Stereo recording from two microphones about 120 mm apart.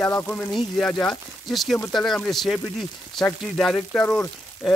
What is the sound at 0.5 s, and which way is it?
Speech, centre (ahead or behind).